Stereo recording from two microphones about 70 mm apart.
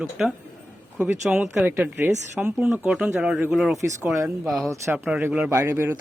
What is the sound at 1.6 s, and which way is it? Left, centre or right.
Speech, right.